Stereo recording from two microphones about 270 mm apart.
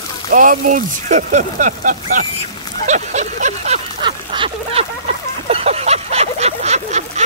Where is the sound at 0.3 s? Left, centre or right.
Right.